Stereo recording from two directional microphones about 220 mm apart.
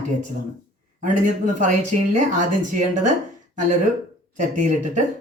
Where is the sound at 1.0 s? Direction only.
35° right (ahead or behind).